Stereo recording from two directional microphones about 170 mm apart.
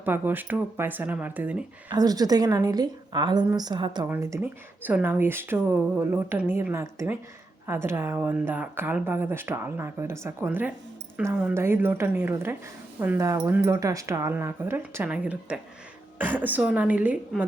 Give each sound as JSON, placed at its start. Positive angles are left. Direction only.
{"t": 0.0, "sound": "speech", "side_deg": -10}
{"t": 1.9, "sound": "a woman's voice", "side_deg": -20}
{"t": 4.1, "sound": "speech", "side_deg": -15}